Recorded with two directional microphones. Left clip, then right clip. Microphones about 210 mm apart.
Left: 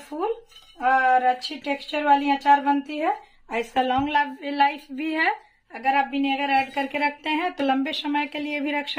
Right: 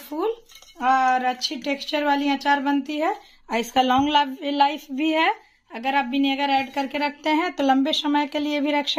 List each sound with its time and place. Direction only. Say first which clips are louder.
0.7 s speech: even; 45° right (ahead or behind); by 5.3 s 25° right (ahead or behind)
5.7 s a woman's voice: left 1 dB; 45° right (ahead or behind); by 8.8 s 30° right (ahead or behind)